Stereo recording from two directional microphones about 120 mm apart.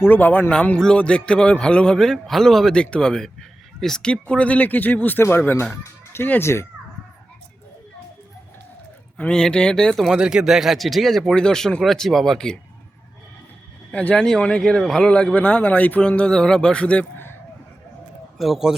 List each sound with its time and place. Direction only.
0.0 s speech: 15° left (ahead or behind)
9.1 s speech: 10° left (ahead or behind)
13.9 s speech: 10° left (ahead or behind)
18.3 s speech: centre (ahead or behind)